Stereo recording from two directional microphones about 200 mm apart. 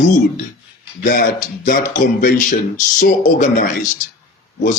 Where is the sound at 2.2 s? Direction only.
40° left (ahead or behind).